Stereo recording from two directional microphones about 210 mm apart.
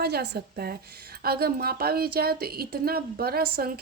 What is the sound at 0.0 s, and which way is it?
Speech, 50° right (ahead or behind).